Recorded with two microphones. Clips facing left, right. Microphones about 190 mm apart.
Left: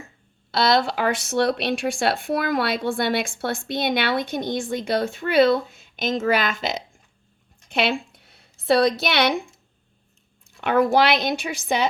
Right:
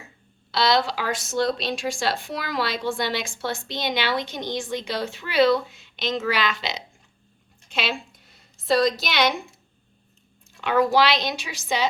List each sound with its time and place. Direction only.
0.5 s a woman's voice: 50° left (ahead or behind)
10.6 s speech: 55° left (ahead or behind)